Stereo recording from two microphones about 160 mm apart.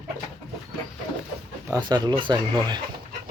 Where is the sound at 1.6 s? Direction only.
25° right (ahead or behind).